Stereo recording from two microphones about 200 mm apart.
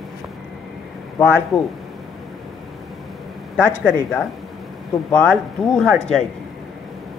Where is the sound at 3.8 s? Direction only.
5° right (ahead or behind).